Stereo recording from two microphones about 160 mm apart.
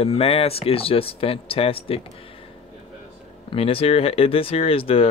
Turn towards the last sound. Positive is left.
turn(degrees=35)  # may be behind; listen again after turning